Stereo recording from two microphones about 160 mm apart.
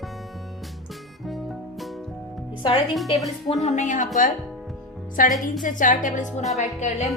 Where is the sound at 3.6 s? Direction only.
45° left (ahead or behind).